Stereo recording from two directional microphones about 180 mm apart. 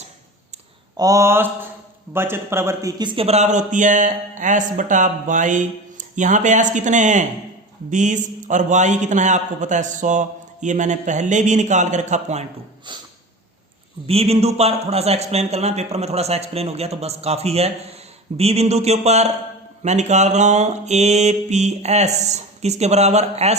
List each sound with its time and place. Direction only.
0.9 s mantra: 20° right (ahead or behind)
2.1 s speech: 15° right (ahead or behind); by 12.5 s 40° right (ahead or behind)
12.9 s snort: 25° right (ahead or behind)
14.1 s a man's voice: 35° right (ahead or behind)